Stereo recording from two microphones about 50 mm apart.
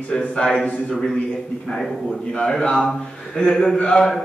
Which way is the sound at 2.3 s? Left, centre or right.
Centre.